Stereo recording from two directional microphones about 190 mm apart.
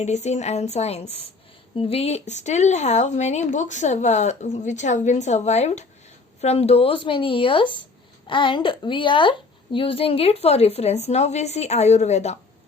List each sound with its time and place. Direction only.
0.0 s speech: 35° left (ahead or behind)